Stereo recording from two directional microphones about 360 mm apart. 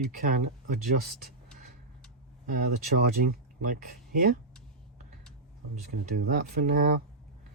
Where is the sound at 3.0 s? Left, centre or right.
Right.